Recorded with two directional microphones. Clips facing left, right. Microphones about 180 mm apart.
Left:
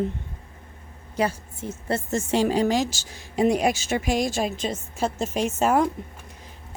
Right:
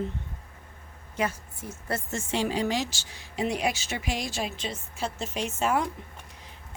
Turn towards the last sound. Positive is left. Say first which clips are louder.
# left 6 dB
turn(degrees=45)  # may be behind; listen again after turning